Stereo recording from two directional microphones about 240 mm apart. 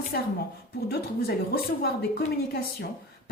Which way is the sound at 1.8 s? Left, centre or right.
Left.